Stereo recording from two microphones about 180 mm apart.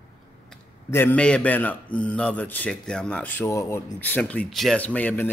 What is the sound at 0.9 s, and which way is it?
A man's voice, 10° left (ahead or behind).